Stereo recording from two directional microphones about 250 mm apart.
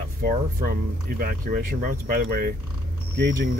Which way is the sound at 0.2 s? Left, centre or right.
Right.